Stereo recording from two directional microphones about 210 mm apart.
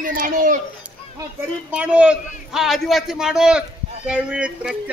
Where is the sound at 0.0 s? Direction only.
40° right (ahead or behind).